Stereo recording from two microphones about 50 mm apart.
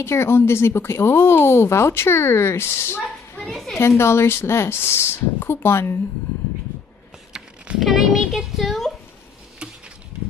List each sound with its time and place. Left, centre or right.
0.0 s speech: left
3.4 s speech: centre
4.0 s speech: left
7.8 s a child's voice: centre